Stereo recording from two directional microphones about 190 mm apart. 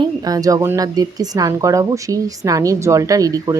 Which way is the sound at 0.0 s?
20° right (ahead or behind).